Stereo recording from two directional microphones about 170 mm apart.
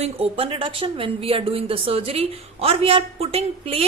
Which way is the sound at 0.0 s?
35° right (ahead or behind).